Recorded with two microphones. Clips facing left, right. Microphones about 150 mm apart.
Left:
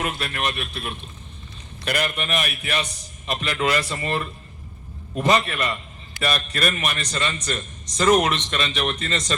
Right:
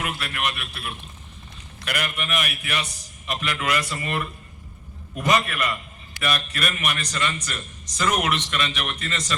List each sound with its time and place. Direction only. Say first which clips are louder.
0.0 s a man's voice: left 2 dB; 30° left (ahead or behind)